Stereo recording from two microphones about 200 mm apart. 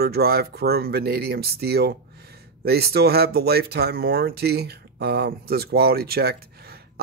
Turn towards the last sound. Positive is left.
turn(degrees=-50)  # may be behind; listen again after turning